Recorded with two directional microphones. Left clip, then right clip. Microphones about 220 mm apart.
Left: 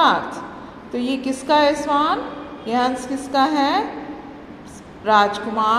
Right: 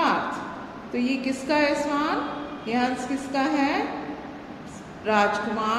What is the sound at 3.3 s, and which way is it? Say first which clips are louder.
Speech: left 7 dB; 30° left (ahead or behind).